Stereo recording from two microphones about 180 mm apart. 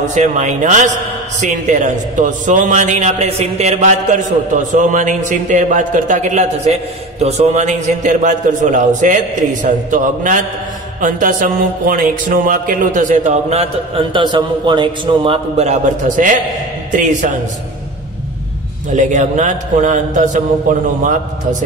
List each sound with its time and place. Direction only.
0.1 s a man's voice: 40° right (ahead or behind)
18.9 s a man's voice: 40° right (ahead or behind)